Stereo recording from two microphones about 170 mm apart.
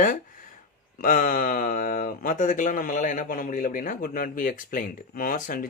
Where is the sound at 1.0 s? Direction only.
55° left (ahead or behind).